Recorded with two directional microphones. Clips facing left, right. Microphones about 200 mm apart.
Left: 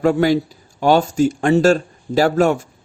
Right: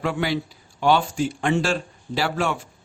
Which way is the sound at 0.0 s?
45° left (ahead or behind).